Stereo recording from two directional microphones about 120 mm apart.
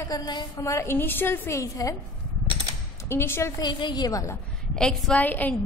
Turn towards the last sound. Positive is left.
turn(degrees=15)  # may be behind; listen again after turning